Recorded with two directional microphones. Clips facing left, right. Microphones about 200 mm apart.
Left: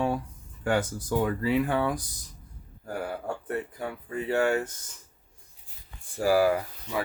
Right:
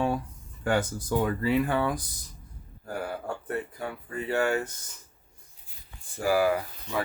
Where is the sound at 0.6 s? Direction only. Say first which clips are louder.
Even; 10° left (ahead or behind).